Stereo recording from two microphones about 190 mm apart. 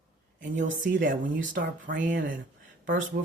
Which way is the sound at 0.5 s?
40° right (ahead or behind).